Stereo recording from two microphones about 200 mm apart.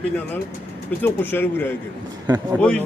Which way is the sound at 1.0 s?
10° left (ahead or behind).